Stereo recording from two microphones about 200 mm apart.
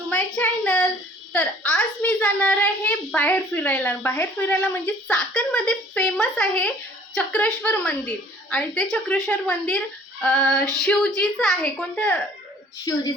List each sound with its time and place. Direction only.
0.3 s a woman's voice: 5° left (ahead or behind)
12.8 s a woman's voice: 15° left (ahead or behind)